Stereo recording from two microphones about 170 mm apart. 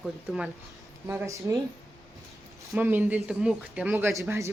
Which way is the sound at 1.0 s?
15° right (ahead or behind).